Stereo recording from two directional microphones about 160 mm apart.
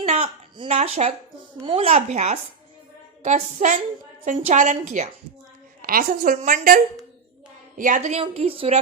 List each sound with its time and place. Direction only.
0.0 s a sound: 45° right (ahead or behind)
0.7 s a woman's voice: 45° right (ahead or behind)
1.6 s a woman's voice: 35° right (ahead or behind)
5.8 s a woman's voice: 60° right (ahead or behind)
8.2 s speech: 35° right (ahead or behind)